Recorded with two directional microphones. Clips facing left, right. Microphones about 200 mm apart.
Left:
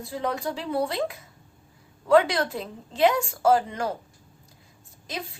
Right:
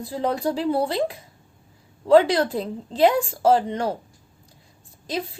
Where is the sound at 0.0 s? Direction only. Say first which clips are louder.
Right 5 dB; 35° right (ahead or behind).